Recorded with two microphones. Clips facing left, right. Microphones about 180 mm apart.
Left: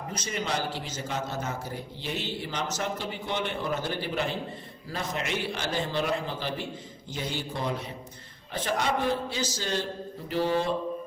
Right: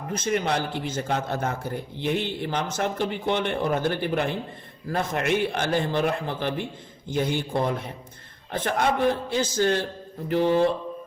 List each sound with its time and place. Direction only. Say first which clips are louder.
0.1 s a man's voice: right 7 dB; 55° right (ahead or behind)